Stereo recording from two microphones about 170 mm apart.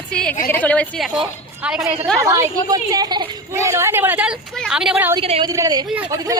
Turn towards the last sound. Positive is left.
turn(degrees=-20)  # may be behind; listen again after turning